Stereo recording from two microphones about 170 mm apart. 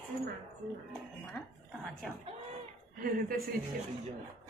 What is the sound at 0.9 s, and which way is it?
Music, 5° left (ahead or behind).